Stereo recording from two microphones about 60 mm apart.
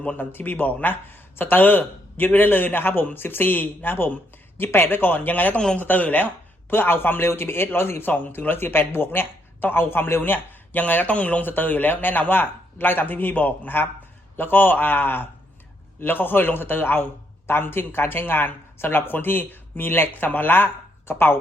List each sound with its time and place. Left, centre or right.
0.2 s a man's voice: left
5.5 s a man's voice: centre
5.8 s a man's voice: left